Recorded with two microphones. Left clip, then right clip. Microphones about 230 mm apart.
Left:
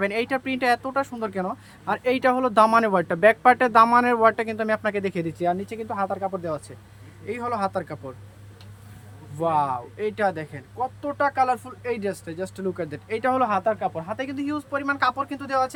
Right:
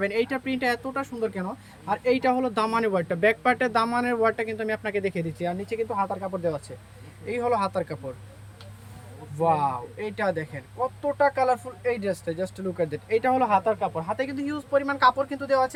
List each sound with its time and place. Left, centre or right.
0.0 s speech: centre
9.4 s speech: centre